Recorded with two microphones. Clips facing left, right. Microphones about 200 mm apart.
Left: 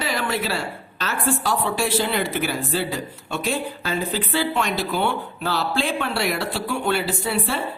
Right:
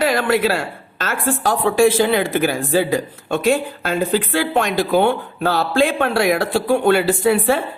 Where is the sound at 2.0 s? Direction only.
90° right.